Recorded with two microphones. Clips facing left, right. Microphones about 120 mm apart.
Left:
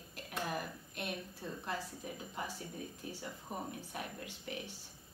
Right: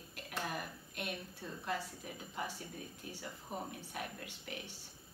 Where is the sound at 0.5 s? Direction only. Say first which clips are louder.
Left 2 dB; 35° left (ahead or behind).